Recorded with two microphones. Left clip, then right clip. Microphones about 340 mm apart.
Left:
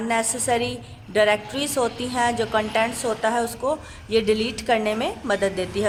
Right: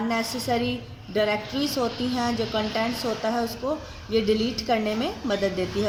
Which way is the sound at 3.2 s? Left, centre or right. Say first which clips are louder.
Left 5 dB; left.